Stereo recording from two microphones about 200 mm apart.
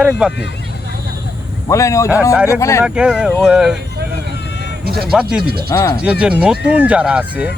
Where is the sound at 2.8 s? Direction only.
5° right (ahead or behind).